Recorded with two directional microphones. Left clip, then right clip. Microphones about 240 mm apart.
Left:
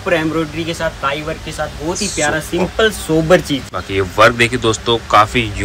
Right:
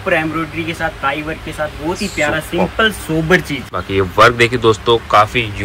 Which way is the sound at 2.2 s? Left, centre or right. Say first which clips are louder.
Right 1 dB; centre.